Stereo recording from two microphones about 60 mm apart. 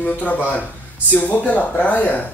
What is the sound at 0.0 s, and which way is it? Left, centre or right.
Speech, left.